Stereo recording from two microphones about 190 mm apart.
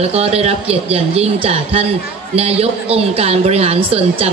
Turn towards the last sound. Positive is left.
turn(degrees=-30)  # may be behind; listen again after turning